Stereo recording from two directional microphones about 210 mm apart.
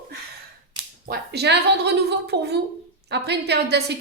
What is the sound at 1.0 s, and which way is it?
A woman's voice, 50° right (ahead or behind).